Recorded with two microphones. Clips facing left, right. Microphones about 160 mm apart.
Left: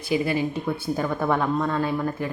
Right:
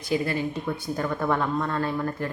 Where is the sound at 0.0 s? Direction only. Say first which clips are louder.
Left 2 dB; 15° left (ahead or behind).